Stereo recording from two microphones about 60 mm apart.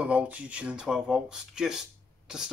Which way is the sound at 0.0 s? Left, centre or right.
Right.